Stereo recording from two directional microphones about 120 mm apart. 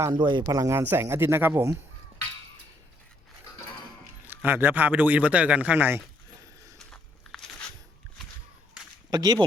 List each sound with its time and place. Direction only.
0.1 s speech: 40° right (ahead or behind); by 1.8 s 20° right (ahead or behind)
4.3 s a man's voice: 15° right (ahead or behind)
6.7 s biting: 5° left (ahead or behind)
9.0 s speech: 35° right (ahead or behind)